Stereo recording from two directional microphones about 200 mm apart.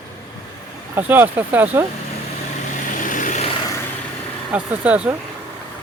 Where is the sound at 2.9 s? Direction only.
40° left (ahead or behind).